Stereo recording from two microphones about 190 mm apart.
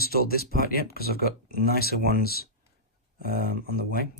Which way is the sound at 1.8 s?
55° left (ahead or behind).